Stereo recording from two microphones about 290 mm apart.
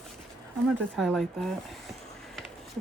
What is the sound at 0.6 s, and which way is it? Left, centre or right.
Speech, centre.